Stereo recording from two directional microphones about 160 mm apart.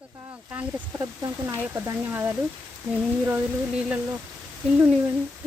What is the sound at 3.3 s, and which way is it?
Speech, 10° right (ahead or behind).